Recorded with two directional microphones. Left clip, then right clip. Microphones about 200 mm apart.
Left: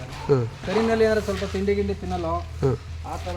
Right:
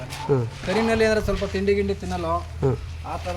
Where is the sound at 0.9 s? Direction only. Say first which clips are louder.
Even; 10° right (ahead or behind).